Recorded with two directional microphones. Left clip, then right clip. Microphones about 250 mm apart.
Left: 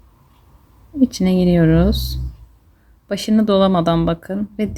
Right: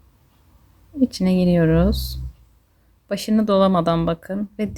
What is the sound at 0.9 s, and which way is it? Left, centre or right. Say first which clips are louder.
Speech: left 3 dB; centre.